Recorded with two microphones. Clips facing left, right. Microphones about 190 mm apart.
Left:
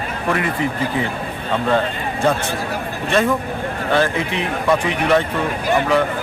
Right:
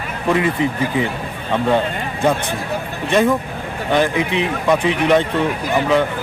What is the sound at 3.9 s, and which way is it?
A man's voice, 15° right (ahead or behind).